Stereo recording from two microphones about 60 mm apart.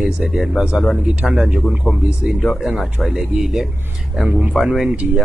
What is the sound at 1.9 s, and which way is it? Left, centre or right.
A man's voice, centre.